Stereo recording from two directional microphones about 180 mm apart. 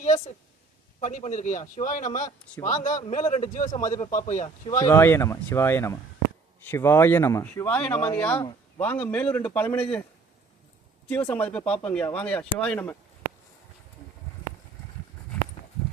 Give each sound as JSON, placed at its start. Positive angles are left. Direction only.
{"t": 0.0, "sound": "a man's voice", "side_deg": 40}
{"t": 4.7, "sound": "speech", "side_deg": 15}
{"t": 11.1, "sound": "speech", "side_deg": 10}